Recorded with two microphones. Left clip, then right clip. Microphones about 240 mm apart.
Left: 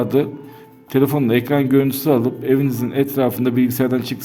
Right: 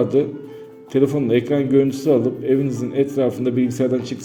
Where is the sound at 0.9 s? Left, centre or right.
Left.